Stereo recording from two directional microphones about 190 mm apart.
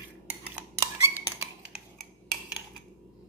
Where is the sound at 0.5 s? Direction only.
15° right (ahead or behind).